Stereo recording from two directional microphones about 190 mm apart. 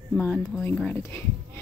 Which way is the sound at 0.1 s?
10° left (ahead or behind).